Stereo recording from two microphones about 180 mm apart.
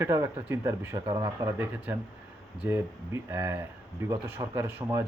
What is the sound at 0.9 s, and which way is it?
Speech, 25° right (ahead or behind).